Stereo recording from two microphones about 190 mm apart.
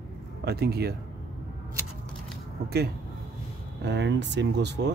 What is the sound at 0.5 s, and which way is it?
Speech, 55° right (ahead or behind).